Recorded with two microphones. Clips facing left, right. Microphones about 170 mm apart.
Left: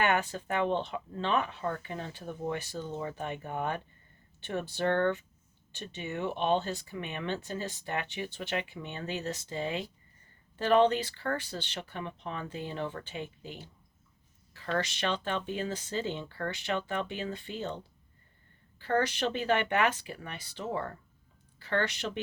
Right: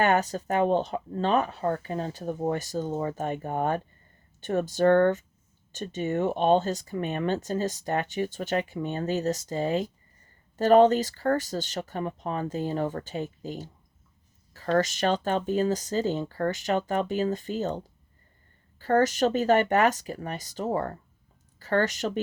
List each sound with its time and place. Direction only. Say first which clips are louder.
0.0 s speech: right 5 dB; 40° right (ahead or behind)